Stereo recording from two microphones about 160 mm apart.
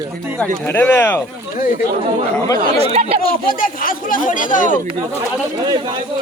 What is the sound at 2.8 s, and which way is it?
Speech, 40° right (ahead or behind).